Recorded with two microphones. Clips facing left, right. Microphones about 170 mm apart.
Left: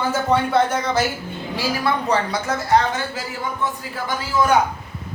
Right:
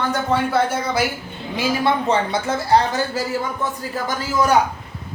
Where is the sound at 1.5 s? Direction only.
25° right (ahead or behind).